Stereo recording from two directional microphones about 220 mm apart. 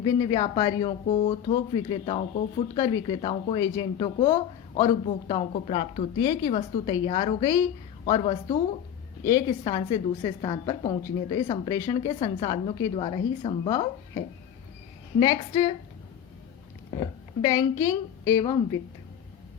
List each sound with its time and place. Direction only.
0.0 s speech: 20° left (ahead or behind)
0.9 s speech: 30° left (ahead or behind)
6.5 s speech: 30° left (ahead or behind)
9.2 s a woman's voice: 15° left (ahead or behind)
15.2 s speech: 20° left (ahead or behind)
17.0 s a woman's voice: 15° left (ahead or behind)